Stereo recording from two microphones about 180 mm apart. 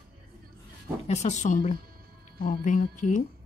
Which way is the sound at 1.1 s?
40° left (ahead or behind).